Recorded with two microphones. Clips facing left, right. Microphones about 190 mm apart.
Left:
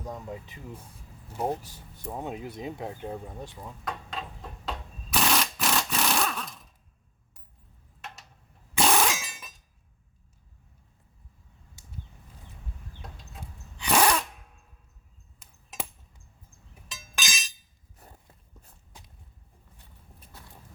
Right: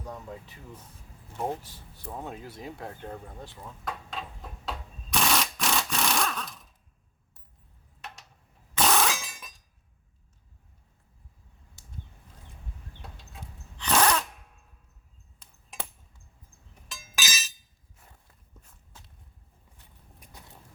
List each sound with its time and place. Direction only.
0.0 s speech: 15° left (ahead or behind)
2.0 s speech: 20° left (ahead or behind)
3.8 s sewing machine: centre (ahead or behind)
8.0 s a sound: centre (ahead or behind)
8.7 s breaking: 10° left (ahead or behind)
13.7 s a sound: 10° left (ahead or behind)
16.9 s chink: centre (ahead or behind)
18.9 s a sound: 15° left (ahead or behind)
20.1 s boat: 15° right (ahead or behind)